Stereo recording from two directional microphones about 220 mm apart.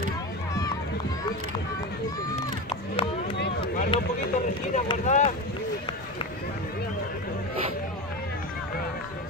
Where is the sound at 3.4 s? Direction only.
50° left (ahead or behind).